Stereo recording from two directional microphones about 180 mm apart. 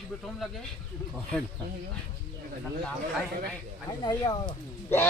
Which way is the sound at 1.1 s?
5° left (ahead or behind).